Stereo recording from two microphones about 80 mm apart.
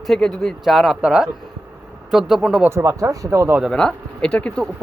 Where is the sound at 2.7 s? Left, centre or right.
Right.